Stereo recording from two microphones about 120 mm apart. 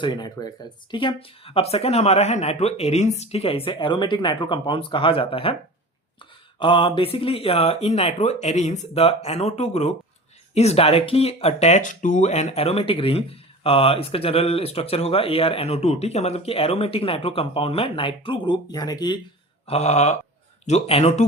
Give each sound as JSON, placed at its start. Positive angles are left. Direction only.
{"t": 0.0, "sound": "speech", "side_deg": 35}
{"t": 6.6, "sound": "speech", "side_deg": 45}
{"t": 9.0, "sound": "speech", "side_deg": 55}
{"t": 19.6, "sound": "a sound", "side_deg": 65}
{"t": 20.7, "sound": "speech", "side_deg": 60}